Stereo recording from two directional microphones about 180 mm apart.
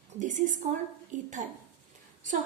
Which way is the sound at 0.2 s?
45° right (ahead or behind).